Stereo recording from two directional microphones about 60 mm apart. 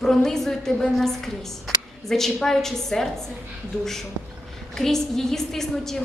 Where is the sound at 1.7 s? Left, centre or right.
Centre.